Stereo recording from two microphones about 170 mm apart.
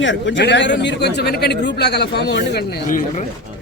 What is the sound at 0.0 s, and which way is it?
Speech, 90° left.